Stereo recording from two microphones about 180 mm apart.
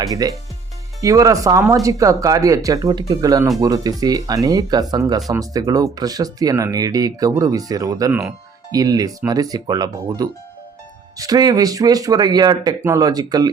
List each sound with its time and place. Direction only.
0.0 s speech: 20° right (ahead or behind)